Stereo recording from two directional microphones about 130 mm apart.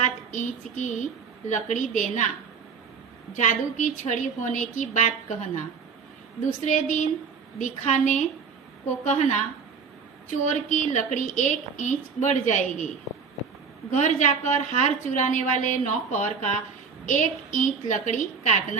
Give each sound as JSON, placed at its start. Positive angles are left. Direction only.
{"t": 0.3, "sound": "a woman's voice", "side_deg": 75}
{"t": 3.3, "sound": "a woman's voice", "side_deg": 70}
{"t": 13.9, "sound": "a woman's voice", "side_deg": 70}
{"t": 17.1, "sound": "a woman's voice", "side_deg": 80}